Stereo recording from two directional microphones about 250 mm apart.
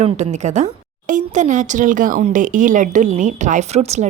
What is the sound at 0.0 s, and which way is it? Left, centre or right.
A woman's voice, right.